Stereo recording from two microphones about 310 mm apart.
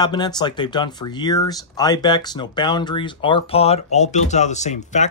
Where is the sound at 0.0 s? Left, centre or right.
Centre.